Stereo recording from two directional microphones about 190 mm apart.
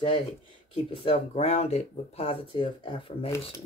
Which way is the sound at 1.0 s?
30° left (ahead or behind).